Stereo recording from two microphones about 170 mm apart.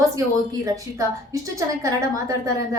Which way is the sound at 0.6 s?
20° right (ahead or behind).